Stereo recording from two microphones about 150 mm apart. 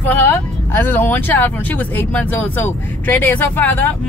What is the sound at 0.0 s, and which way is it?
Speech, 15° left (ahead or behind).